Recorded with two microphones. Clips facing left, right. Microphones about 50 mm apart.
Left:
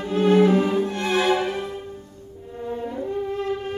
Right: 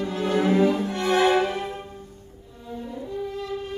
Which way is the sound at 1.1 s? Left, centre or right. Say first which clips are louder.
Right 2 dB; right.